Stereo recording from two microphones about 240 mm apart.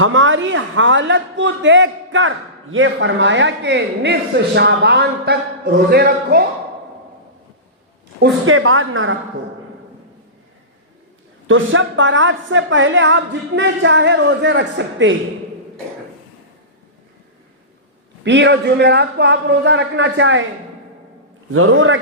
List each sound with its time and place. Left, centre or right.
0.0 s a man's voice: right
8.2 s a woman's voice: right
11.4 s a man's voice: right
18.3 s a man's voice: right
21.5 s a woman's voice: right